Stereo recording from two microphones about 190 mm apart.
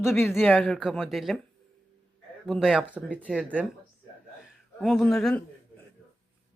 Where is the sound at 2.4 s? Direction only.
Centre (ahead or behind).